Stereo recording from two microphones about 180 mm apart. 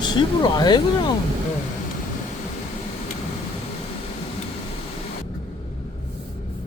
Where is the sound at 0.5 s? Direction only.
25° left (ahead or behind).